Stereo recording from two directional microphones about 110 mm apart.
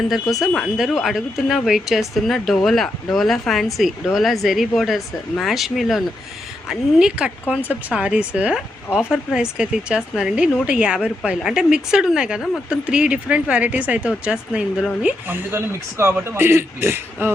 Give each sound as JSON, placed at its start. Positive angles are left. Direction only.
{"t": 0.1, "sound": "speech", "side_deg": 0}
{"t": 15.0, "sound": "speech", "side_deg": -15}